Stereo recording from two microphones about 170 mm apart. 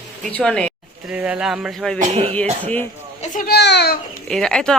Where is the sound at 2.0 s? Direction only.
40° right (ahead or behind).